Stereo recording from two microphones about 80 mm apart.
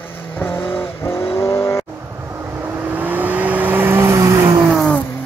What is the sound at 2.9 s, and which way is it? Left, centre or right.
Vehicle, right.